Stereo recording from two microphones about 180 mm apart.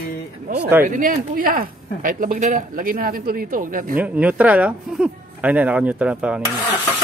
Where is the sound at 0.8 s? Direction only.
50° right (ahead or behind).